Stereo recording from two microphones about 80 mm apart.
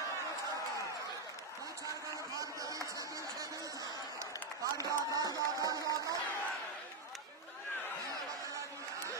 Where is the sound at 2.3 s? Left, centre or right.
Right.